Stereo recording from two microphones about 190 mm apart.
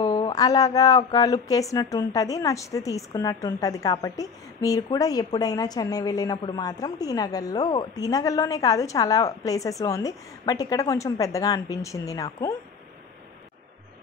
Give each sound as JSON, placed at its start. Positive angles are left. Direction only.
{"t": 0.0, "sound": "speech", "side_deg": 20}